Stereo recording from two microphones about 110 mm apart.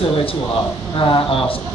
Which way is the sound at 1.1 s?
55° left (ahead or behind).